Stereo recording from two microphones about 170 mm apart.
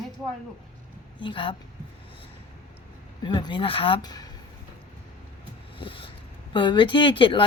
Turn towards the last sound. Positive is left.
turn(degrees=30)  # may be behind; listen again after turning